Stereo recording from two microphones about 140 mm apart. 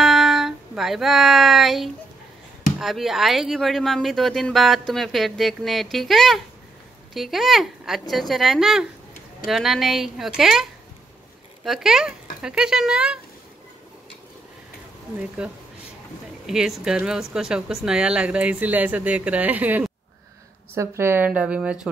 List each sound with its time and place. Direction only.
0.0 s music: centre (ahead or behind)
2.8 s speech: centre (ahead or behind)
15.4 s speech: 5° right (ahead or behind)